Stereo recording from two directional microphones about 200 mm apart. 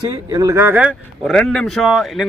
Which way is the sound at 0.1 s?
20° right (ahead or behind).